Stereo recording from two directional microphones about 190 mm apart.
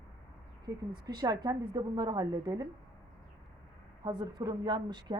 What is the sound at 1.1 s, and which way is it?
A woman's voice, 20° right (ahead or behind).